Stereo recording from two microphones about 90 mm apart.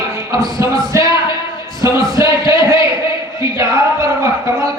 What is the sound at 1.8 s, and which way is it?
Music, 40° right (ahead or behind).